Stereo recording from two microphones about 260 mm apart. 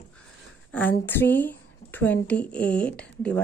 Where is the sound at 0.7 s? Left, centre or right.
Centre.